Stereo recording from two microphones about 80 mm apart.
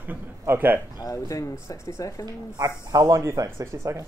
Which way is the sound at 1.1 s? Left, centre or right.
Left.